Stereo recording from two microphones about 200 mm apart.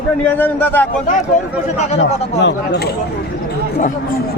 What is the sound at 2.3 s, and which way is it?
Speech, 60° left (ahead or behind).